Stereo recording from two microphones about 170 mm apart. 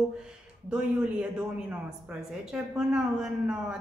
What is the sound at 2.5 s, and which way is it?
A man's voice, 5° right (ahead or behind).